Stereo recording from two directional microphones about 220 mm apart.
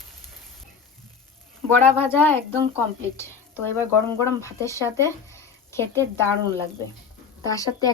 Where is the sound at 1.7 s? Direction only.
10° left (ahead or behind).